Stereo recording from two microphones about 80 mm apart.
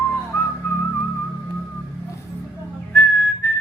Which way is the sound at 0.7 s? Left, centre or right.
Left.